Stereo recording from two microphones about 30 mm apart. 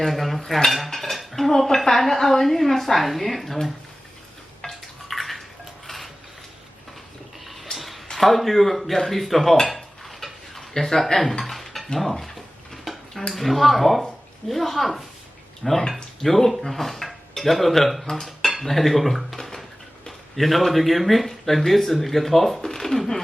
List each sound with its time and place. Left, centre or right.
0.0 s a man's voice: centre
4.6 s a sound: left
5.0 s a sound: centre
5.9 s cutlery: centre
7.4 s a sound: centre
8.1 s speech: centre
10.8 s speech: left
11.1 s dishes: centre
13.3 s a man's voice: centre
18.3 s dishes: centre
20.3 s a man's voice: centre